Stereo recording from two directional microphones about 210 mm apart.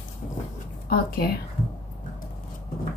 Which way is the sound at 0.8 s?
50° left (ahead or behind).